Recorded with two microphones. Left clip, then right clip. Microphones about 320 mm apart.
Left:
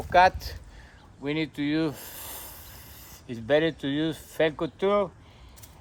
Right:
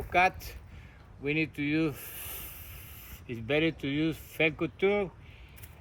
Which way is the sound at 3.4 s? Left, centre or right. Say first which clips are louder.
Left 5 dB; centre.